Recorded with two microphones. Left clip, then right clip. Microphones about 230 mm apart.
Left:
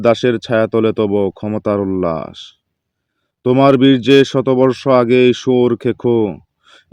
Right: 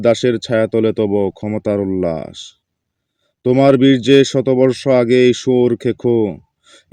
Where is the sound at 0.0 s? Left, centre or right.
Centre.